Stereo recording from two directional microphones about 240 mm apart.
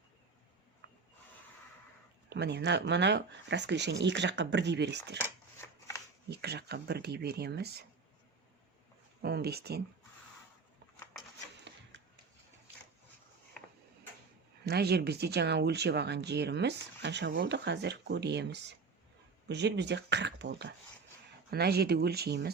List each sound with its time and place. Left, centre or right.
2.3 s speech: right
6.3 s speech: right
9.2 s speech: right
11.9 s a sound: right
14.6 s speech: right